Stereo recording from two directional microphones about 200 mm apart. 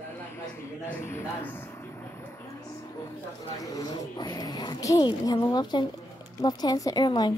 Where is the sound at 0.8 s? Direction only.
10° left (ahead or behind).